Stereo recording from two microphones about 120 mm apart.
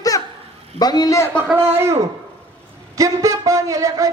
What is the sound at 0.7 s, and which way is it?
Speech, 35° left (ahead or behind).